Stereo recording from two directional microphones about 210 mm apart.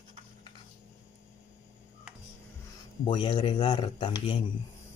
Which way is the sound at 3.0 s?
20° left (ahead or behind).